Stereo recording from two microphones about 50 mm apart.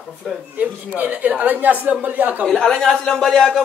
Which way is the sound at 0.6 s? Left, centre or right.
Right.